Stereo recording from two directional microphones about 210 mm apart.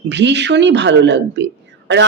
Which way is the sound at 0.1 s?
55° right (ahead or behind).